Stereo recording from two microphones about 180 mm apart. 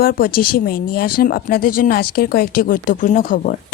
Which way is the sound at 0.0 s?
55° left (ahead or behind).